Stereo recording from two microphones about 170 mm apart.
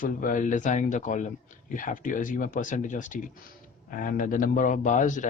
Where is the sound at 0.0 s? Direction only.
50° left (ahead or behind).